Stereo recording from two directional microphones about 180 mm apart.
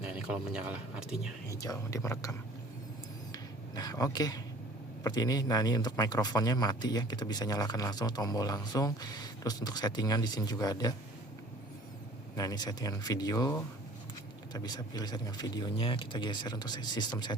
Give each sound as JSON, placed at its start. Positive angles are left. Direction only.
{"t": 0.3, "sound": "speech", "side_deg": -5}
{"t": 1.6, "sound": "speech", "side_deg": 20}
{"t": 3.3, "sound": "a sound", "side_deg": 20}
{"t": 5.0, "sound": "speech", "side_deg": 20}
{"t": 12.4, "sound": "speech", "side_deg": 20}